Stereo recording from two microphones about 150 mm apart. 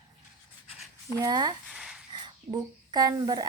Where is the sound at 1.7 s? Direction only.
5° right (ahead or behind).